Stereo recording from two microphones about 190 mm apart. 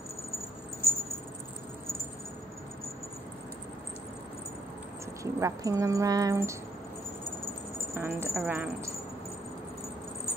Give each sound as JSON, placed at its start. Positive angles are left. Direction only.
{"t": 5.2, "sound": "speech", "side_deg": -15}
{"t": 7.9, "sound": "speech", "side_deg": -15}